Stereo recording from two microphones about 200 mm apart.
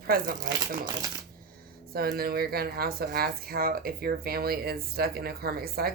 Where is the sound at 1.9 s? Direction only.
50° right (ahead or behind).